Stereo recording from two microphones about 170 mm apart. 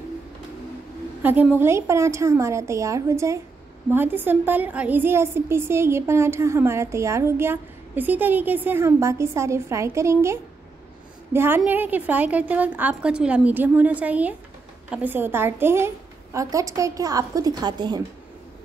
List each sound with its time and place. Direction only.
1.2 s a woman's voice: 10° right (ahead or behind)